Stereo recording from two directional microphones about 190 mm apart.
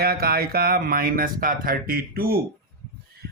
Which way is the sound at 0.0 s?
55° right (ahead or behind).